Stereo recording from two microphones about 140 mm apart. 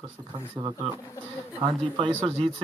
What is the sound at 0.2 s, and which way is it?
Speech, 20° right (ahead or behind).